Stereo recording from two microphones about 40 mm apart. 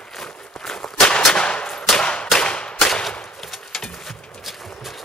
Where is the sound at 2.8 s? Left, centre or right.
Centre.